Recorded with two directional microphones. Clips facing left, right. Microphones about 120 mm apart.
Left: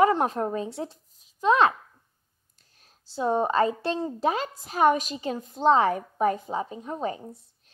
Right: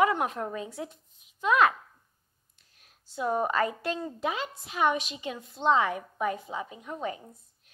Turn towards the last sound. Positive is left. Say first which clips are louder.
# left 4 dB
turn(degrees=30)  # may be behind; listen again after turning